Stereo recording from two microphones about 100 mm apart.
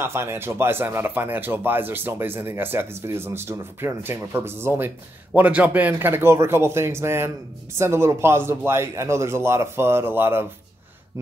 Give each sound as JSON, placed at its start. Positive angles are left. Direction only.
{"t": 0.0, "sound": "speech", "side_deg": -25}